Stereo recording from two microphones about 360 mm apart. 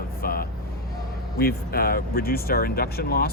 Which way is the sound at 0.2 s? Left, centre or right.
Left.